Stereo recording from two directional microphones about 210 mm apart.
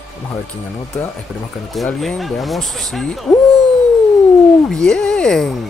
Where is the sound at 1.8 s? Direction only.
Centre (ahead or behind).